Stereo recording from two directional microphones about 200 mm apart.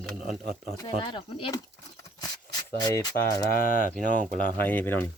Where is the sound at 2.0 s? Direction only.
20° left (ahead or behind).